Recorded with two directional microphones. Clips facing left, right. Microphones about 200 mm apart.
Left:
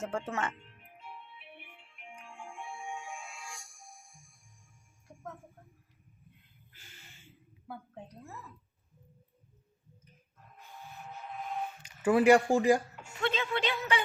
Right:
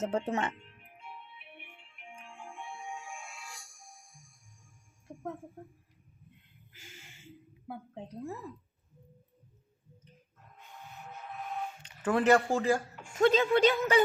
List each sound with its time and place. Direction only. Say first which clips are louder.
0.0 s a woman's voice: right 4 dB; 20° right (ahead or behind)
2.4 s music: left 1 dB; centre (ahead or behind)
5.0 s a sound: right 6 dB; 30° right (ahead or behind)
7.7 s a woman's voice: right 3 dB; 30° right (ahead or behind)
11.8 s speech: left 4 dB; 10° left (ahead or behind)
13.1 s a woman's voice: right 8 dB; 40° right (ahead or behind)